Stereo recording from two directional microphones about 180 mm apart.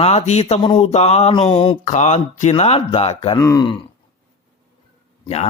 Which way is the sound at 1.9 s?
40° left (ahead or behind).